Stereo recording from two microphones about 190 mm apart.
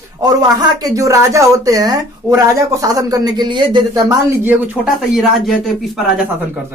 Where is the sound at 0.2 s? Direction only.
20° right (ahead or behind).